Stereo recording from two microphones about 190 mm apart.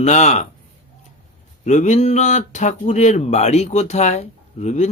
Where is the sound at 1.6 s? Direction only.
40° left (ahead or behind).